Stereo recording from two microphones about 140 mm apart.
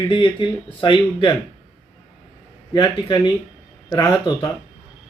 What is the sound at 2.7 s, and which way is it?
Speech, 30° left (ahead or behind).